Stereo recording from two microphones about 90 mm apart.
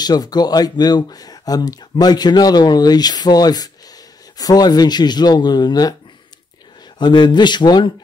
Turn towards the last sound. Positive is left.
turn(degrees=55)  # may be behind; listen again after turning